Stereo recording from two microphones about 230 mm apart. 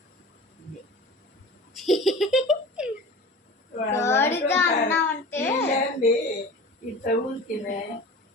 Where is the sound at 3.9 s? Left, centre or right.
Centre.